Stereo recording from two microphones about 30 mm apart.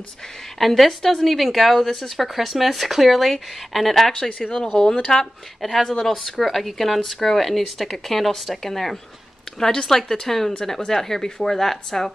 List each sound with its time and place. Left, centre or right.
0.6 s speech: centre
4.1 s speech: left
5.6 s speech: centre